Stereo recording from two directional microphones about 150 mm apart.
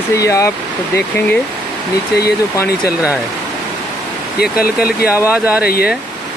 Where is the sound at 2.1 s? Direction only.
90° left.